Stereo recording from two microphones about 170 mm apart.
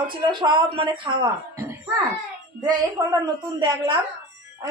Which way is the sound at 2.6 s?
25° right (ahead or behind).